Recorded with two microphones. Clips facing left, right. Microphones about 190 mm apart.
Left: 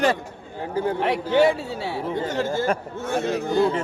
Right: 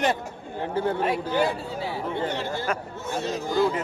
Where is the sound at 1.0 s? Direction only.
75° left (ahead or behind).